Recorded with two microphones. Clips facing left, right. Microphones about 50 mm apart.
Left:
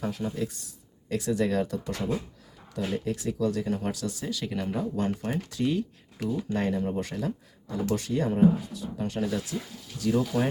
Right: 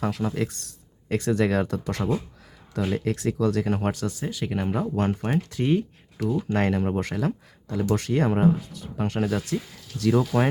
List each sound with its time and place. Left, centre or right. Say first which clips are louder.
0.0 s speech: right 4 dB; right
1.0 s speech: right 4 dB; right
2.9 s speech: right 4 dB; right
4.3 s speech: right 3 dB; right
6.2 s speech: right 4 dB; right
7.9 s speech: right 1 dB; right